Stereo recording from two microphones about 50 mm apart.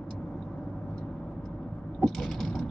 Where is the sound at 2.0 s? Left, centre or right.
Centre.